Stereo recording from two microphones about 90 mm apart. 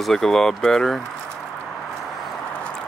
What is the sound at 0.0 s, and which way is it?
Speech, 5° left (ahead or behind).